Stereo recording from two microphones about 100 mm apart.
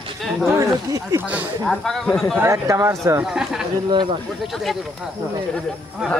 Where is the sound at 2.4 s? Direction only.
30° right (ahead or behind).